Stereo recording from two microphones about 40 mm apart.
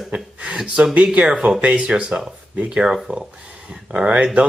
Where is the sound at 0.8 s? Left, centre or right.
Right.